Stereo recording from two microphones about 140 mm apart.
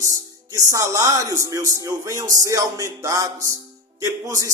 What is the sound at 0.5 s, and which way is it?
A man's voice, 20° right (ahead or behind).